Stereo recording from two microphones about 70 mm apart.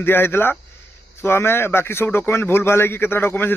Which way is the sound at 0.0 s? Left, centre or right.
Left.